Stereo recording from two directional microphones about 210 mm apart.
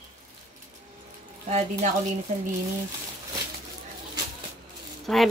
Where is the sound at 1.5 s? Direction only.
35° right (ahead or behind).